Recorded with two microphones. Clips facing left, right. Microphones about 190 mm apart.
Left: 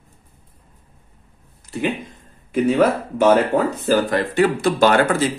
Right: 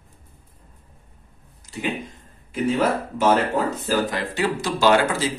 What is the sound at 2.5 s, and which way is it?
Speech, 55° left (ahead or behind).